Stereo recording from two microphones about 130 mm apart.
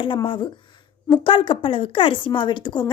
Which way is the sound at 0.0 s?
40° left (ahead or behind).